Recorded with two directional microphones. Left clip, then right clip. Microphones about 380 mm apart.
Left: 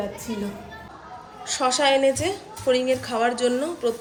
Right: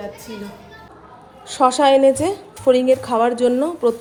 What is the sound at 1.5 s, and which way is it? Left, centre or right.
A woman's voice, centre.